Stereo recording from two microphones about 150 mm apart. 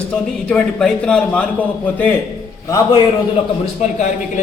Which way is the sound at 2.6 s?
25° left (ahead or behind).